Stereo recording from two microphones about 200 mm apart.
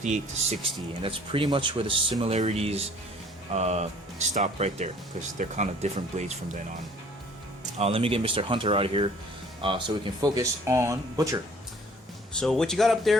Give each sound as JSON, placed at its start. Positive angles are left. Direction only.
{"t": 0.6, "sound": "speech", "side_deg": -25}
{"t": 7.8, "sound": "speech", "side_deg": -30}
{"t": 12.3, "sound": "speech", "side_deg": 5}